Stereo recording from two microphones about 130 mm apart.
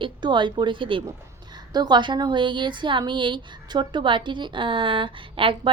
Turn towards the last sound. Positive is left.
turn(degrees=-40)  # may be behind; listen again after turning